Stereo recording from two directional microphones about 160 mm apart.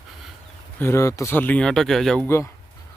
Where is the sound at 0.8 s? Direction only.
15° left (ahead or behind).